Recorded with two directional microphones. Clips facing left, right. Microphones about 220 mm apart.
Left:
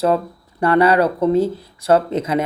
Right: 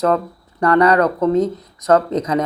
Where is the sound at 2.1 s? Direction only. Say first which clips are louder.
Right 1 dB; 25° left (ahead or behind).